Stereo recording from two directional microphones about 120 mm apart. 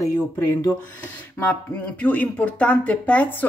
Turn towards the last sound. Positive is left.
turn(degrees=15)  # may be behind; listen again after turning